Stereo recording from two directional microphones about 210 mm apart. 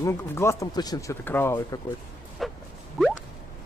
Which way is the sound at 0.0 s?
10° left (ahead or behind).